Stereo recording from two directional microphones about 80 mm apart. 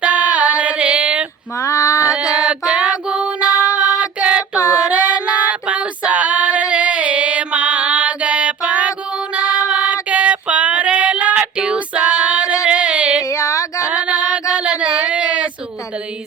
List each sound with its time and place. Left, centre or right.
0.0 s female singing: centre
1.5 s female singing: left
2.0 s female singing: centre
13.2 s female singing: left
13.8 s female singing: centre